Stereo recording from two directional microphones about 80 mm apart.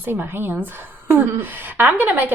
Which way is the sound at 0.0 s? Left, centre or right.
Right.